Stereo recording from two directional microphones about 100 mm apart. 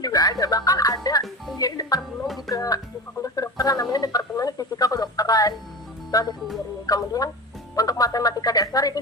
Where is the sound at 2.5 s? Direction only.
35° left (ahead or behind).